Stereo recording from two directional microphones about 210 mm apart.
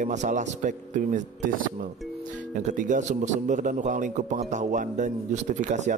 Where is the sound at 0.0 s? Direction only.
35° right (ahead or behind).